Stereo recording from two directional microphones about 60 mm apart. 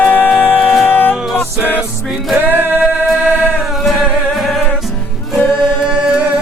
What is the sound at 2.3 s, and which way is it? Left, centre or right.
Music, right.